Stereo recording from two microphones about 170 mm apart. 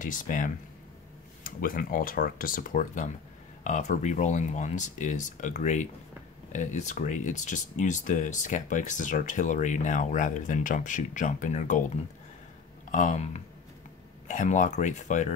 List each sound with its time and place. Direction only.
0.0 s speech: 50° left (ahead or behind)